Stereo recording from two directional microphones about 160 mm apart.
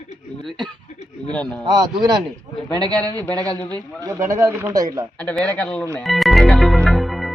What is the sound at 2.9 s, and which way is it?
Speech, 25° right (ahead or behind).